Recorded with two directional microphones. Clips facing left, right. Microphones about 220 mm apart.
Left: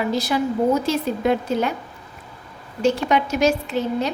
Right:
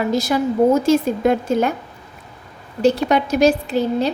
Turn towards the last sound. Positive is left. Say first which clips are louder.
# right 4 dB
turn(degrees=-35)  # may be behind; listen again after turning